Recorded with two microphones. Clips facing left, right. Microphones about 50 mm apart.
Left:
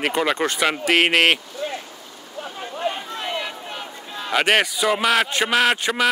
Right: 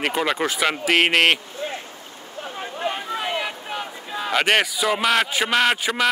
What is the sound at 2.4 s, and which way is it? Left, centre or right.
Chatter, centre.